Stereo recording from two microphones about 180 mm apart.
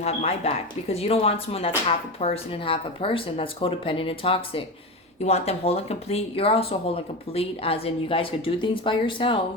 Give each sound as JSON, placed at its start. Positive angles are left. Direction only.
{"t": 0.0, "sound": "speech", "side_deg": 35}